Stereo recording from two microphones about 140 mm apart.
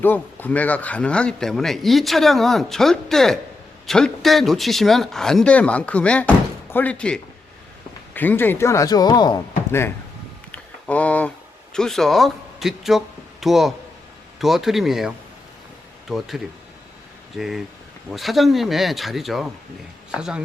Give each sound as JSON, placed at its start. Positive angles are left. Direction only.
{"t": 0.0, "sound": "speech", "side_deg": 15}
{"t": 10.5, "sound": "a sound", "side_deg": 10}
{"t": 11.7, "sound": "a man's voice", "side_deg": 5}